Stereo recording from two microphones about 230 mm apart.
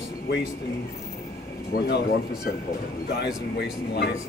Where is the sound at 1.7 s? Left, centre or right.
Left.